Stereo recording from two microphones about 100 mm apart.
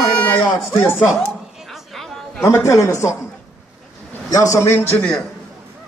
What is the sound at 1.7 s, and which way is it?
Chatter, centre (ahead or behind).